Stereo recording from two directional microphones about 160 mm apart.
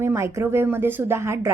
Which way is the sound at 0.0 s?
15° right (ahead or behind).